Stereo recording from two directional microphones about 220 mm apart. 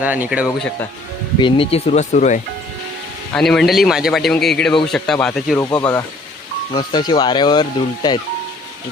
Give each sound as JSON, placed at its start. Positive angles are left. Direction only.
{"t": 0.0, "sound": "speech", "side_deg": -5}
{"t": 1.4, "sound": "speech", "side_deg": 25}
{"t": 3.3, "sound": "speech", "side_deg": 0}
{"t": 5.6, "sound": "speech", "side_deg": 15}